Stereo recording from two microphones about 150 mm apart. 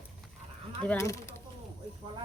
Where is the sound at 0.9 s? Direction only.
20° left (ahead or behind).